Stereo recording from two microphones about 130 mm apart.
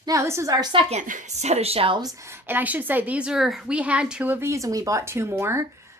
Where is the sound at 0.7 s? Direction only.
50° right (ahead or behind).